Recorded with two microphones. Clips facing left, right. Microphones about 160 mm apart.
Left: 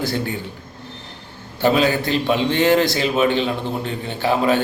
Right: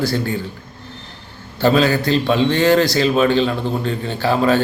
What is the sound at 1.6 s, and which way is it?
A man's voice, 20° left (ahead or behind).